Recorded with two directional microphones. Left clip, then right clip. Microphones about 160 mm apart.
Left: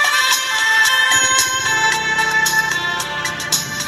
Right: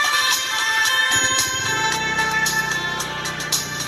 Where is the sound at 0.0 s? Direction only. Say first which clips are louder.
Left 4 dB; 65° left (ahead or behind).